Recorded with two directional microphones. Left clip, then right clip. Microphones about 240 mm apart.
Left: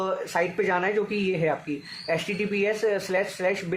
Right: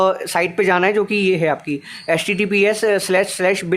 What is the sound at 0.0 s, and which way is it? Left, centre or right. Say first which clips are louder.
Speech: right 9 dB; right.